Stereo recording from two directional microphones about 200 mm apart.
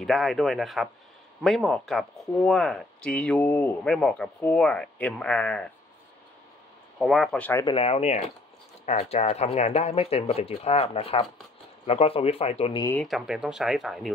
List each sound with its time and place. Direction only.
0.0 s speech: centre (ahead or behind)
7.0 s speech: centre (ahead or behind)
7.6 s speech: 30° left (ahead or behind)
13.0 s speech: centre (ahead or behind)